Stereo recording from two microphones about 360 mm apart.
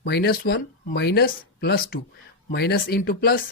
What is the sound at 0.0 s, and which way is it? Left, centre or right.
Speech, left.